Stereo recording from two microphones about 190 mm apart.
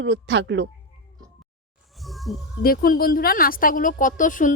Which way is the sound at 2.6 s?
50° left (ahead or behind).